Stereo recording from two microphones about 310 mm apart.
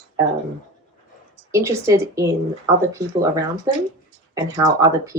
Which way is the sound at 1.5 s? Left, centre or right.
Centre.